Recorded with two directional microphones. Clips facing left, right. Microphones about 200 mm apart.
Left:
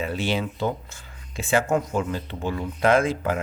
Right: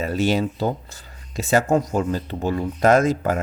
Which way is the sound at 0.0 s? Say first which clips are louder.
Right 5 dB; 40° right (ahead or behind).